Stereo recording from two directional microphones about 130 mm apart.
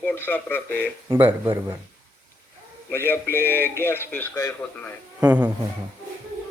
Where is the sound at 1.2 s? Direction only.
15° right (ahead or behind).